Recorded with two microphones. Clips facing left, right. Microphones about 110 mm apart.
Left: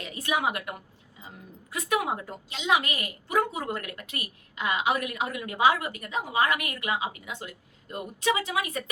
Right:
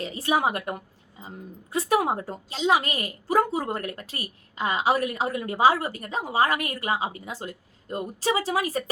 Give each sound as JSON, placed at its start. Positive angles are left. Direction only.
{"t": 0.0, "sound": "a woman's voice", "side_deg": -30}
{"t": 1.7, "sound": "a woman's voice", "side_deg": -35}